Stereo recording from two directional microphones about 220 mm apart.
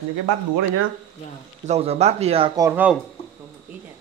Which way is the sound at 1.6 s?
30° right (ahead or behind).